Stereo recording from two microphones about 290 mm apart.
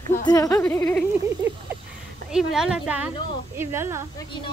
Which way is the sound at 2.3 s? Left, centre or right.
Centre.